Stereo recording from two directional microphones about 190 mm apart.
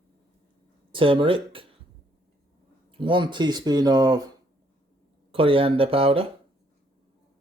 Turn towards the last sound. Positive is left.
turn(degrees=-30)  # may be behind; listen again after turning